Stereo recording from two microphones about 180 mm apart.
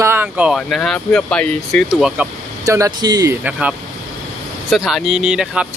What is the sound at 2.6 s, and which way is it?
Speech, 20° right (ahead or behind).